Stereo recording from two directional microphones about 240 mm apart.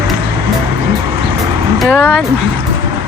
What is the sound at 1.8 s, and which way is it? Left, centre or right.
Speech, centre.